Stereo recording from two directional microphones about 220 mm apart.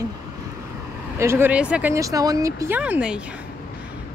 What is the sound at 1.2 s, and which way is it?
Speech, 10° right (ahead or behind).